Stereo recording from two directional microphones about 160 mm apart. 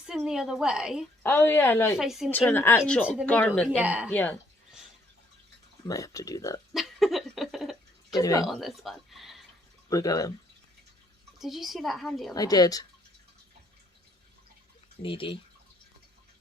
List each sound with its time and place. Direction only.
0.3 s a woman's voice: centre (ahead or behind)
1.2 s speech: 10° left (ahead or behind)
2.0 s a woman's voice: centre (ahead or behind)
2.3 s speech: 10° left (ahead or behind)
3.8 s speech: 10° right (ahead or behind)
4.1 s speech: 10° left (ahead or behind)
5.8 s speech: 20° left (ahead or behind)
6.7 s a sound: centre (ahead or behind)
8.1 s speech: 20° left (ahead or behind)
8.4 s speech: centre (ahead or behind)
9.9 s speech: 20° left (ahead or behind)
11.3 s a woman's voice: centre (ahead or behind)
12.3 s speech: 25° left (ahead or behind)
15.0 s speech: 35° left (ahead or behind)